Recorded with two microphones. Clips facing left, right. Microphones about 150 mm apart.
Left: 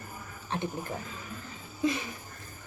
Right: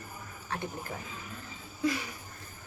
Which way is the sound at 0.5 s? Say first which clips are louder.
Left 4 dB; 25° left (ahead or behind).